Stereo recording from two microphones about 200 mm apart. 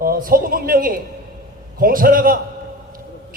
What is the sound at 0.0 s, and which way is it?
A man's voice, 45° right (ahead or behind).